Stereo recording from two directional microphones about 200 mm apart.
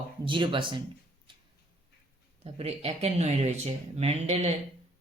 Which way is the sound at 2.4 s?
30° right (ahead or behind).